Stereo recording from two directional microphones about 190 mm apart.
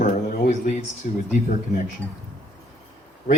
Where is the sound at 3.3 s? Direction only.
50° left (ahead or behind).